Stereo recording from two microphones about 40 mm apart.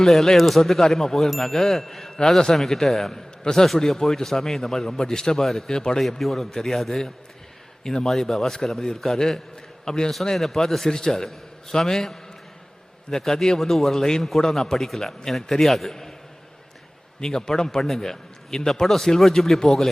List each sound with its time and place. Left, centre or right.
0.0 s a man's voice: centre
6.0 s a man's voice: centre
9.1 s a man's voice: centre
10.3 s a man's voice: centre
13.2 s a man's voice: centre
17.2 s a man's voice: centre
17.7 s a man's voice: centre